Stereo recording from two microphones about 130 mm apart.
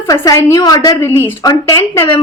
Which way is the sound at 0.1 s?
25° left (ahead or behind).